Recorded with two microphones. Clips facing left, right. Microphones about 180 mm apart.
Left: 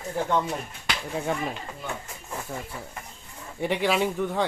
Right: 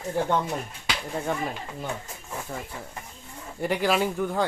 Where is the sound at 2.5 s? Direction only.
5° left (ahead or behind).